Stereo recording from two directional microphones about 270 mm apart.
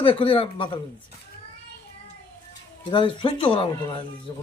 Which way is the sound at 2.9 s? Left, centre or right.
Centre.